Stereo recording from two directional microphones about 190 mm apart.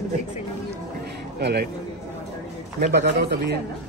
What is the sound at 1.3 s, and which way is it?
Speech, 55° right (ahead or behind).